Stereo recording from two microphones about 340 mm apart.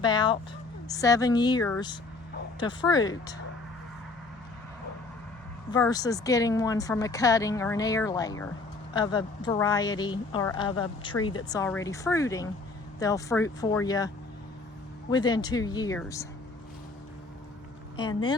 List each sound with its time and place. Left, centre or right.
0.0 s speech: centre
5.7 s speech: centre
15.1 s speech: centre
17.9 s speech: centre